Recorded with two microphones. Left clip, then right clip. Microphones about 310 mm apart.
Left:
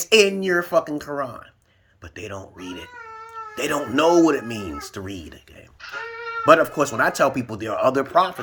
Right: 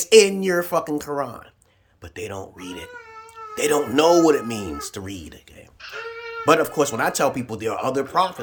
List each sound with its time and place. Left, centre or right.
0.0 s speech: centre
6.4 s speech: centre